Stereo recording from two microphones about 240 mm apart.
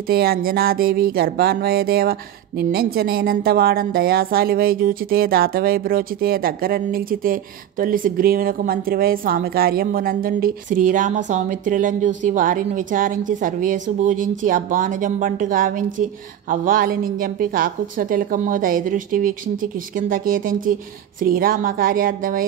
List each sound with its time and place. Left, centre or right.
0.1 s speech: right